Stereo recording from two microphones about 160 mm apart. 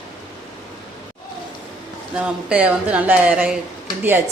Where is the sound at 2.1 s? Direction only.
5° right (ahead or behind).